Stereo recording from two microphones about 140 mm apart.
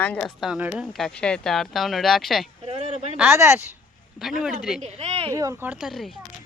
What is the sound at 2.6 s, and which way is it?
Speech, 50° right (ahead or behind).